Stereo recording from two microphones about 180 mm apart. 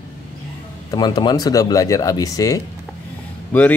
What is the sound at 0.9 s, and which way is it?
Speech, 25° left (ahead or behind).